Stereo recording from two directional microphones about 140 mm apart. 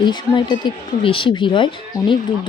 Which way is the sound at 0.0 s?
35° left (ahead or behind).